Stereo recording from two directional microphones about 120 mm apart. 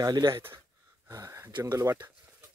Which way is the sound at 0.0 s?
35° right (ahead or behind).